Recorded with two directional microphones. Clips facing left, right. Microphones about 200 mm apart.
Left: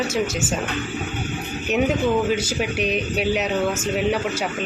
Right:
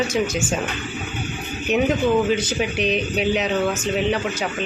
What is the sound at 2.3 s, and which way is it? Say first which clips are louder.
Speech: right 1 dB; 5° left (ahead or behind).